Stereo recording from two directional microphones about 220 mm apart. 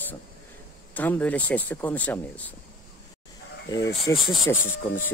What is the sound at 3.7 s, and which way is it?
Speech, 15° left (ahead or behind).